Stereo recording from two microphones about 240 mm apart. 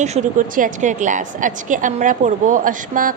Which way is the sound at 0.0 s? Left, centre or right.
Right.